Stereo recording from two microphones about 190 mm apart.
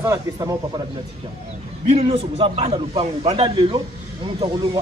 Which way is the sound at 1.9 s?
30° right (ahead or behind).